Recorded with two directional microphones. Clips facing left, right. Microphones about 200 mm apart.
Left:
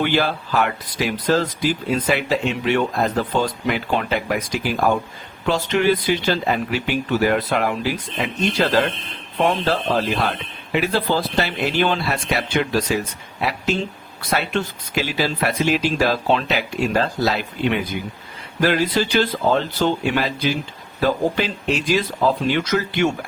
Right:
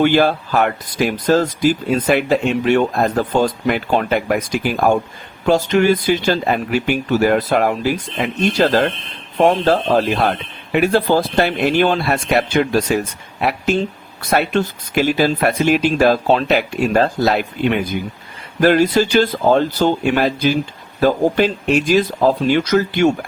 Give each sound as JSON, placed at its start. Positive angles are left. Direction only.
{"t": 0.0, "sound": "speech", "side_deg": -50}
{"t": 14.2, "sound": "speech", "side_deg": -45}
{"t": 18.6, "sound": "speech", "side_deg": -45}